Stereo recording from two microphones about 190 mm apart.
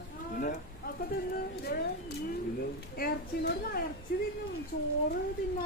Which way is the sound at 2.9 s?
55° left (ahead or behind).